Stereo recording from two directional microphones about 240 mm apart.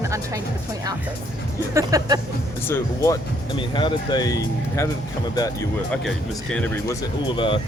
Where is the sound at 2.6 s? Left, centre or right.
Centre.